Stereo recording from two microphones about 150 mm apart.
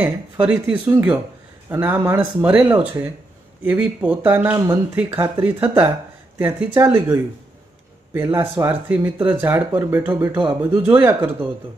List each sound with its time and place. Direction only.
0.0 s speech: 10° right (ahead or behind)